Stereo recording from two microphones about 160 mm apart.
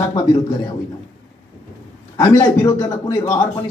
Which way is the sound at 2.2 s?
20° left (ahead or behind).